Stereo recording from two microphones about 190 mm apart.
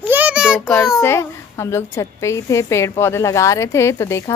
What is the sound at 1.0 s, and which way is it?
A woman's voice, 15° left (ahead or behind).